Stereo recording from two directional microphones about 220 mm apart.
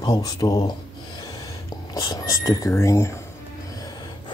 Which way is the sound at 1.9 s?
15° left (ahead or behind).